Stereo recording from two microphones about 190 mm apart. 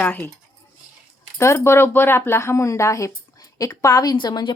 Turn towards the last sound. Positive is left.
turn(degrees=20)  # may be behind; listen again after turning